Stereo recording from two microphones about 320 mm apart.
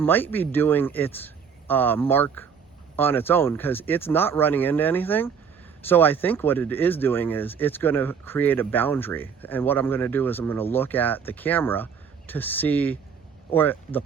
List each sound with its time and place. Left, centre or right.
0.0 s speech: centre